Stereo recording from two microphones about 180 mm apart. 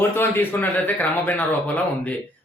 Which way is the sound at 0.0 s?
10° left (ahead or behind).